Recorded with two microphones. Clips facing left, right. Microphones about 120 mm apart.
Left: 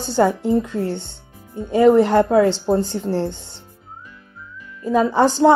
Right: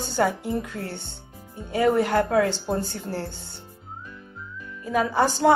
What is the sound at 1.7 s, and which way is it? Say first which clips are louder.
Speech: left 8 dB; 20° left (ahead or behind).